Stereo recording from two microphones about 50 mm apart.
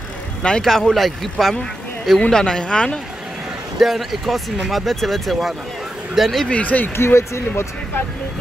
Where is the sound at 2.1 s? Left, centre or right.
Centre.